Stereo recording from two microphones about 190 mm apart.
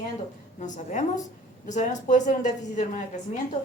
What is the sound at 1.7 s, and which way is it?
A woman's voice, 40° left (ahead or behind).